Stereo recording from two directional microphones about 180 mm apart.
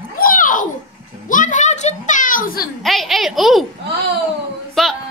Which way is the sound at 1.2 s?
45° left (ahead or behind).